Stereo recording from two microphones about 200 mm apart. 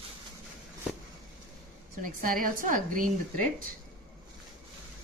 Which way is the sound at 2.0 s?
45° right (ahead or behind).